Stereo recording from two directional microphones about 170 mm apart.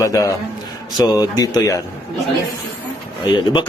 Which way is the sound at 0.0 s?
20° left (ahead or behind).